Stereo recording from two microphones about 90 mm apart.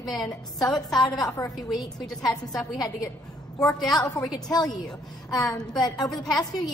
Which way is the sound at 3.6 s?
40° left (ahead or behind).